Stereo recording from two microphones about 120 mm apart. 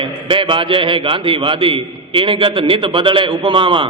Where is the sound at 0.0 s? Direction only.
45° right (ahead or behind).